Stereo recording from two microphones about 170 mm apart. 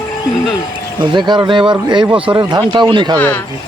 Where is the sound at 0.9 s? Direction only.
25° right (ahead or behind).